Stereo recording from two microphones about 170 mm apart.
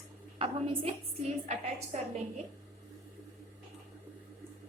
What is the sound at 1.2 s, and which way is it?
Speech, 40° right (ahead or behind).